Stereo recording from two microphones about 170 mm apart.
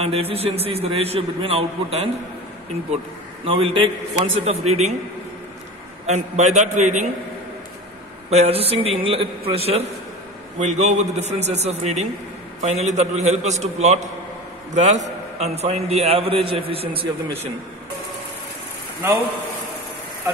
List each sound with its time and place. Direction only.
0.0 s a man's voice: 35° right (ahead or behind)
3.4 s a man's voice: 35° right (ahead or behind)
6.0 s a man's voice: 45° right (ahead or behind)
8.3 s a man's voice: 40° right (ahead or behind)